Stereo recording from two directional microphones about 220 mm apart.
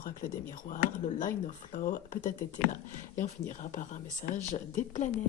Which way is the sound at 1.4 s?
40° left (ahead or behind).